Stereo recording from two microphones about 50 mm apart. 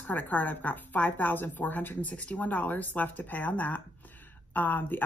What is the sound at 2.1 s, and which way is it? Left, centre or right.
A woman's voice, left.